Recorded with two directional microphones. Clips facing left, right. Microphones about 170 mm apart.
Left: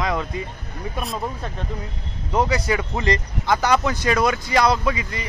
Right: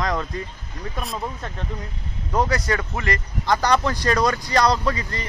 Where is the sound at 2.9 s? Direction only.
20° left (ahead or behind).